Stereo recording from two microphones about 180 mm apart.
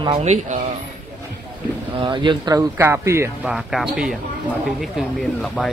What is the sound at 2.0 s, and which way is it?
Speech, 25° right (ahead or behind).